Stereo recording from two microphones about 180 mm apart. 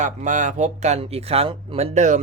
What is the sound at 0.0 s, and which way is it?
Speech, 45° right (ahead or behind).